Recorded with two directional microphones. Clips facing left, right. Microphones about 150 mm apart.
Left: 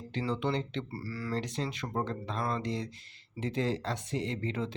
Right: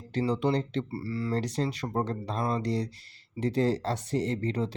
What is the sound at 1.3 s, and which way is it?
Speech, 40° right (ahead or behind).